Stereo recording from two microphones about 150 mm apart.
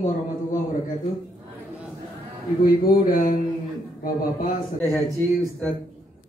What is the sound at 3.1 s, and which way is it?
Speech, 65° left (ahead or behind).